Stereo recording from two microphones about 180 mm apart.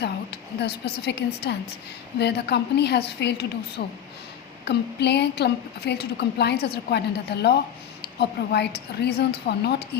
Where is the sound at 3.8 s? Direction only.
50° left (ahead or behind).